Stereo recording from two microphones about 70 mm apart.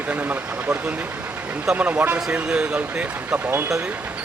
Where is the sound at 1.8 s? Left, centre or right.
Right.